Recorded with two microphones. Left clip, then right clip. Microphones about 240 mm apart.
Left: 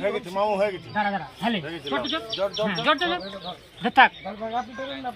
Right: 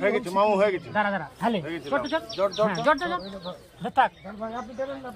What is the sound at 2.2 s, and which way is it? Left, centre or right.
Speech, left.